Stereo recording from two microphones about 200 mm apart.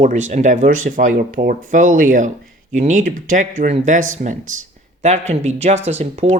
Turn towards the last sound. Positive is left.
turn(degrees=-35)  # may be behind; listen again after turning